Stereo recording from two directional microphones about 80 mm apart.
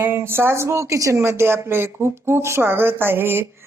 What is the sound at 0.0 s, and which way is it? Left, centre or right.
Speech, right.